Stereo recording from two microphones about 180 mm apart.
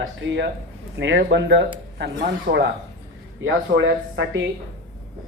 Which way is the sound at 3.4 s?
90° right.